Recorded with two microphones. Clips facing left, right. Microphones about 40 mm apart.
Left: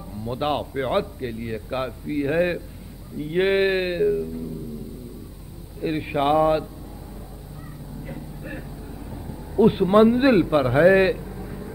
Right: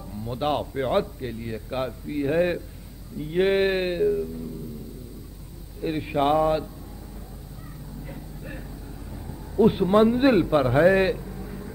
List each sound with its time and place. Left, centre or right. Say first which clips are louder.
0.1 s a man's voice: left 1 dB; centre
5.8 s a man's voice: left 1 dB; centre
8.0 s vehicle: left 4 dB; centre
9.1 s a man's voice: left 3 dB; centre